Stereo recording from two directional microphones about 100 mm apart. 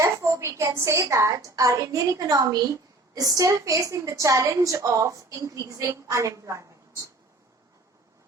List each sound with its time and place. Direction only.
0.0 s a woman's voice: 30° right (ahead or behind)